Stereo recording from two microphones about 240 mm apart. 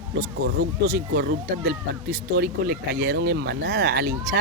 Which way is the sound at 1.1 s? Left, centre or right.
Right.